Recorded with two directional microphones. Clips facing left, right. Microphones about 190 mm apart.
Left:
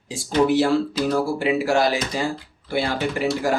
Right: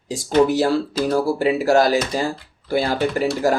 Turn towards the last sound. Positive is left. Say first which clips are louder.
# right 3 dB
turn(degrees=-40)  # may be behind; listen again after turning